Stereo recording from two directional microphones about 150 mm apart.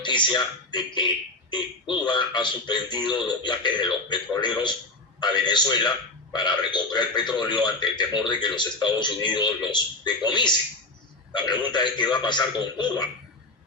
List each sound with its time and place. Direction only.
0.0 s a man's voice: 30° left (ahead or behind)